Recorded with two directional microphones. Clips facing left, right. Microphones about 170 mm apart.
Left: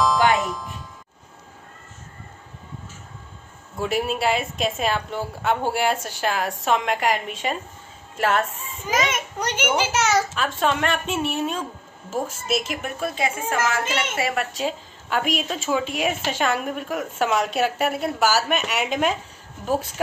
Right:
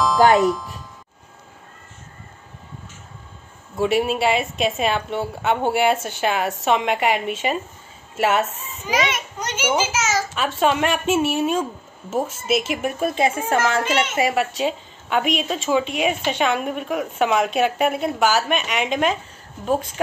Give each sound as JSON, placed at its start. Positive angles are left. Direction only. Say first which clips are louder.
{"t": 0.4, "sound": "a woman's voice", "louder": "right 8 dB", "side_deg": 0}
{"t": 3.7, "sound": "a woman's voice", "louder": "right 5 dB", "side_deg": 0}
{"t": 8.9, "sound": "a child's voice", "louder": "right 1 dB", "side_deg": 55}
{"t": 10.6, "sound": "a woman's voice", "louder": "right 4 dB", "side_deg": -10}
{"t": 13.0, "sound": "a woman's voice", "louder": "right 4 dB", "side_deg": -25}
{"t": 14.3, "sound": "a woman's voice", "louder": "right 4 dB", "side_deg": 0}